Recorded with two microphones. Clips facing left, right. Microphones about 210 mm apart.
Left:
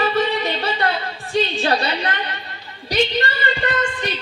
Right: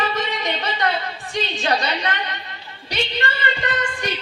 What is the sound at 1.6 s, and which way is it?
Speech, 35° left (ahead or behind).